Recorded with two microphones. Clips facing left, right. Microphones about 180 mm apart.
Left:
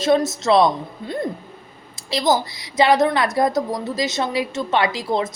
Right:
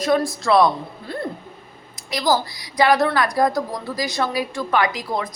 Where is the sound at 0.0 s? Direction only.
25° left (ahead or behind).